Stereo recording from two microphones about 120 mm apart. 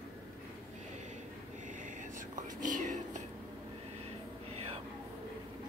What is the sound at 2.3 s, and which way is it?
Whispering, 90° right.